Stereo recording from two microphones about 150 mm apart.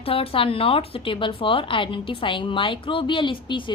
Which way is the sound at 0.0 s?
40° left (ahead or behind).